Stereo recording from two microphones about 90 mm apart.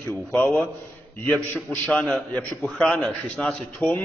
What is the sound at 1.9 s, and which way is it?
A man's voice, 15° left (ahead or behind).